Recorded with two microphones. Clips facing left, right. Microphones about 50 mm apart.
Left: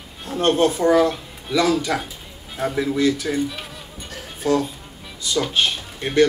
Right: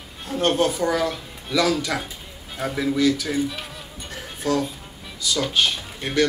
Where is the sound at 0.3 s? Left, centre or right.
Centre.